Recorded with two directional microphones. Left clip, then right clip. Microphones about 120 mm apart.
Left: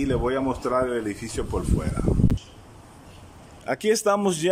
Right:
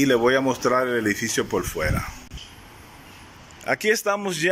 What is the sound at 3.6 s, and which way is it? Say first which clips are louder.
Speech: right 1 dB; 15° left (ahead or behind).